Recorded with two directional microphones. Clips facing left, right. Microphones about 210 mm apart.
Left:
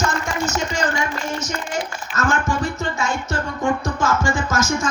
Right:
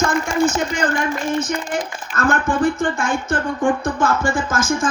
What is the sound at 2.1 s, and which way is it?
Speech, 55° right (ahead or behind).